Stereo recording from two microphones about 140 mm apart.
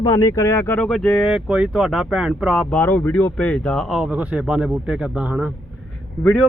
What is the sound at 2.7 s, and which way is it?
Speech, 10° left (ahead or behind).